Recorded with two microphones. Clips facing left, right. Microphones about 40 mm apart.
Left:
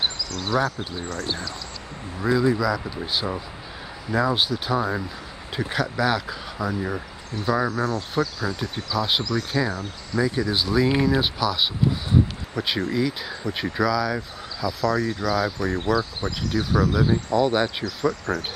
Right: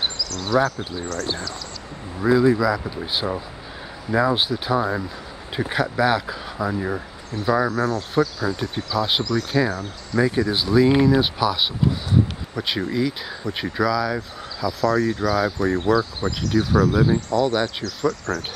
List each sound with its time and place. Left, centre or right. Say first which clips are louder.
0.2 s speech: right 6 dB; centre
2.1 s speech: right 4 dB; centre
17.3 s speech: even; centre